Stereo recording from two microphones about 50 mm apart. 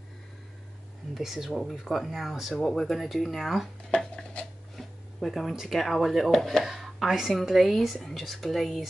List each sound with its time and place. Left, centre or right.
1.1 s speech: centre
2.5 s speech: centre
3.9 s a sound: centre
4.7 s speech: centre
6.6 s speech: centre